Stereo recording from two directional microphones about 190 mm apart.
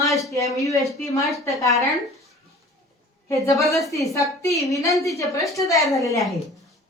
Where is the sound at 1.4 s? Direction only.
15° left (ahead or behind).